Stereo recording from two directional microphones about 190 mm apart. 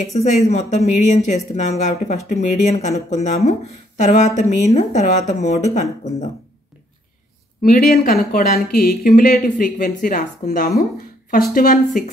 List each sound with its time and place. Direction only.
0.0 s speech: 35° left (ahead or behind)
7.6 s speech: 50° left (ahead or behind)
10.8 s a sound: 50° left (ahead or behind)
11.5 s speech: 45° left (ahead or behind)